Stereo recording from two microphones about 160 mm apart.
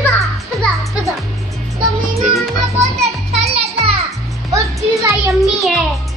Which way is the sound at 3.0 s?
40° right (ahead or behind).